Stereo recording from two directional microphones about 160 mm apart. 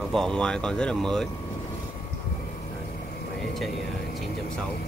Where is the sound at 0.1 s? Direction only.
5° left (ahead or behind).